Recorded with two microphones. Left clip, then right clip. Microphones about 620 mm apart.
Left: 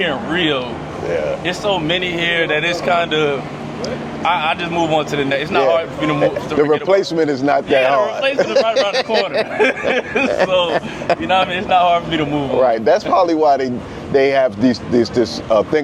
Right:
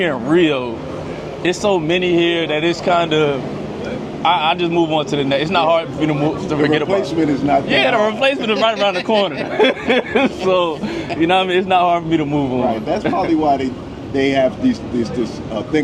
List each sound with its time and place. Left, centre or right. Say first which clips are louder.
0.0 s speech: right 2 dB; right
6.9 s a man's voice: left 2 dB; left
7.7 s speech: left 1 dB; right
8.7 s speech: left 2 dB; left
9.6 s speech: right 3 dB; right
11.3 s speech: right 2 dB; right
12.9 s speech: left 4 dB; left